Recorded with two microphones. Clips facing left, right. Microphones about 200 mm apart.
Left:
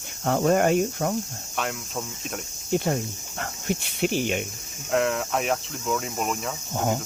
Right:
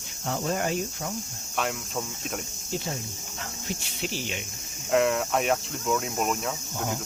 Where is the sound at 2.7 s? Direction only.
55° left (ahead or behind).